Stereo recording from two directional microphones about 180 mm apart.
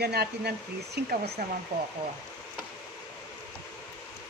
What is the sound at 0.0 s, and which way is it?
Speech, 65° right (ahead or behind).